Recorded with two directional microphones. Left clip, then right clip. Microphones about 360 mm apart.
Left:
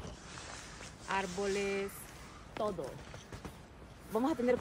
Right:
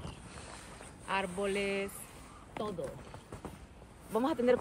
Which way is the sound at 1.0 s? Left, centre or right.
Centre.